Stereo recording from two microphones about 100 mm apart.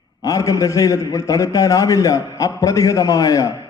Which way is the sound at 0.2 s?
35° left (ahead or behind).